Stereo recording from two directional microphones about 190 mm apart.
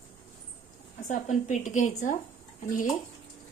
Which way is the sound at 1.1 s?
40° left (ahead or behind).